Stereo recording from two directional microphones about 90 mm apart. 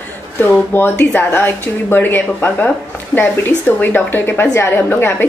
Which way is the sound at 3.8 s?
20° left (ahead or behind).